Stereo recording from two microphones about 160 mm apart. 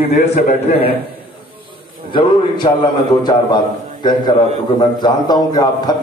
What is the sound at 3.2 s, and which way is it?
A man's voice, 25° left (ahead or behind).